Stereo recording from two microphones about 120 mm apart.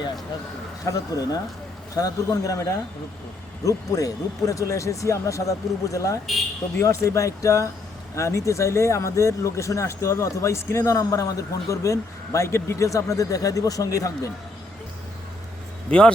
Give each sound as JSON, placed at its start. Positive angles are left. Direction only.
{"t": 0.9, "sound": "speech", "side_deg": 30}
{"t": 15.9, "sound": "a man's voice", "side_deg": 5}